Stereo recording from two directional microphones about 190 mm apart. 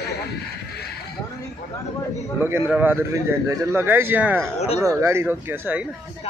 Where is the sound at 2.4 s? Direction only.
10° right (ahead or behind).